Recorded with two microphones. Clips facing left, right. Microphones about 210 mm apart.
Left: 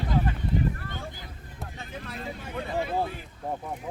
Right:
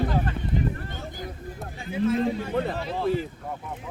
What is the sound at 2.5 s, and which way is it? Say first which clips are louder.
Speech: right 8 dB; 55° right (ahead or behind).